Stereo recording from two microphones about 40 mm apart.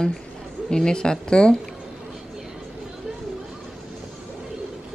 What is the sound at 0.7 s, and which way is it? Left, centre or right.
Speech, centre.